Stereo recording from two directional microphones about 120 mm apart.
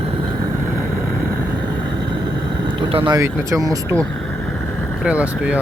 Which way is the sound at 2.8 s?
50° right (ahead or behind).